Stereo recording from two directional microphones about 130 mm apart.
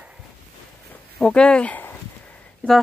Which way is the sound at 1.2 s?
5° left (ahead or behind).